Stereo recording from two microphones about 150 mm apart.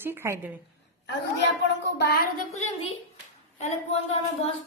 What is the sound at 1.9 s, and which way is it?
Speech, 90° left.